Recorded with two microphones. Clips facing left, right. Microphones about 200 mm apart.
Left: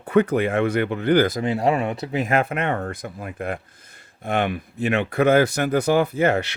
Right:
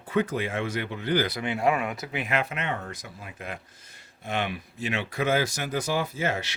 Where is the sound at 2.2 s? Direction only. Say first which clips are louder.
Left 7 dB; 50° left (ahead or behind).